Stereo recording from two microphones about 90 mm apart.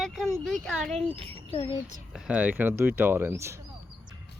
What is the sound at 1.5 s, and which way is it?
Speech, 90° left.